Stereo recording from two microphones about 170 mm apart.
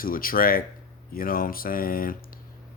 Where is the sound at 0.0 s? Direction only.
55° left (ahead or behind).